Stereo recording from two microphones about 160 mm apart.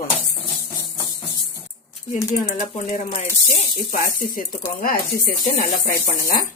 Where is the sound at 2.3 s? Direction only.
55° left (ahead or behind).